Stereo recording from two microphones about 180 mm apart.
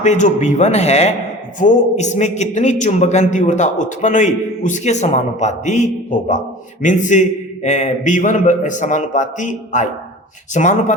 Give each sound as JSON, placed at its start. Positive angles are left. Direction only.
{"t": 0.0, "sound": "a man's voice", "side_deg": 40}